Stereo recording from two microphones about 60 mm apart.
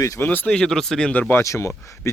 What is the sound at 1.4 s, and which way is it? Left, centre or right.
Speech, left.